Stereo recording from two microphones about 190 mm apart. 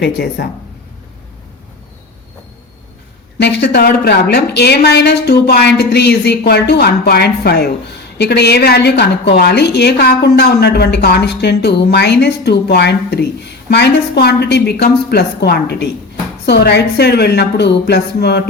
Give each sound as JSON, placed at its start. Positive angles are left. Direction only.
{"t": 0.0, "sound": "a woman's voice", "side_deg": 55}
{"t": 3.3, "sound": "a woman's voice", "side_deg": 60}